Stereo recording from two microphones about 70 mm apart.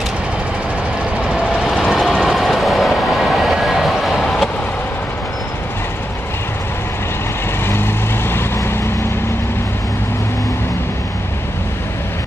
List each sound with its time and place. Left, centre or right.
1.1 s vehicle: centre
1.9 s train: centre
7.6 s vehicle: left